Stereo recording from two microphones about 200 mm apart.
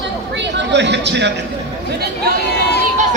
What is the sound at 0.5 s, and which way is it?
Speech, 60° right (ahead or behind).